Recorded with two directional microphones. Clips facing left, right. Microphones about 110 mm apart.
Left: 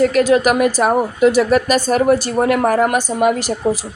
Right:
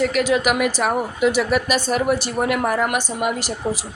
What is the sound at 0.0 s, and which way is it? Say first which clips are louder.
A woman's voice: left 6 dB; 40° left (ahead or behind).